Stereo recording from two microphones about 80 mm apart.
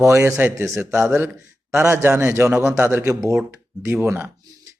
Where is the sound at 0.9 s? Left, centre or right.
Right.